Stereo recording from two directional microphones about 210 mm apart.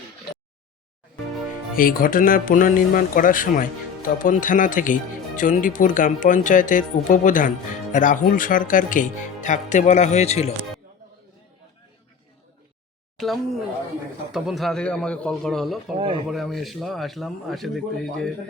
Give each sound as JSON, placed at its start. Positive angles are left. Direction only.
{"t": 1.7, "sound": "speech", "side_deg": 40}
{"t": 13.1, "sound": "speech", "side_deg": 0}
{"t": 16.0, "sound": "speech", "side_deg": -25}
{"t": 16.3, "sound": "speech", "side_deg": 0}